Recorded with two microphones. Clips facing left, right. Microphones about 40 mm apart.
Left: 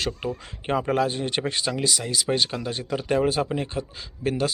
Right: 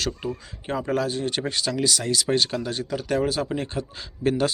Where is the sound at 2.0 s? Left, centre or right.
Centre.